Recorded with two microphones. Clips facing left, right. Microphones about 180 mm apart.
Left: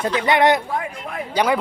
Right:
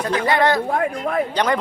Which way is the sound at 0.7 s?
50° right (ahead or behind).